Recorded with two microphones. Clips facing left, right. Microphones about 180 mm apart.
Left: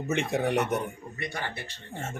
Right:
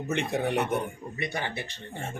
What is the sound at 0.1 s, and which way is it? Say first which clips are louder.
Speech: left 1 dB; 5° left (ahead or behind).